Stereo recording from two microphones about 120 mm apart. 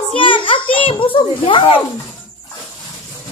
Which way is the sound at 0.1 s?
45° left (ahead or behind).